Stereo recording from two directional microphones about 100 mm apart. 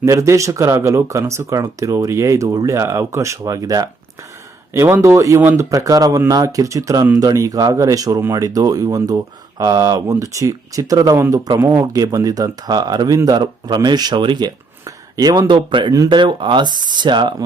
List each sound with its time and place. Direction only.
0.0 s speech: 30° right (ahead or behind)
5.4 s speech: 20° right (ahead or behind)
5.7 s speech: 35° right (ahead or behind)
14.8 s a sound: 35° right (ahead or behind)
15.4 s speech: 50° right (ahead or behind)